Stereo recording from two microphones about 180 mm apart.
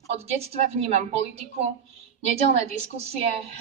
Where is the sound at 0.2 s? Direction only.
35° right (ahead or behind).